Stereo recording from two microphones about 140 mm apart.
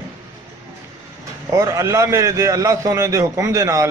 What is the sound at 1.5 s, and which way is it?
A man's voice, 25° right (ahead or behind).